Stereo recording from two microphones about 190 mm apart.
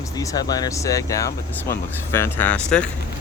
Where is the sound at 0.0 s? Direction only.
15° left (ahead or behind).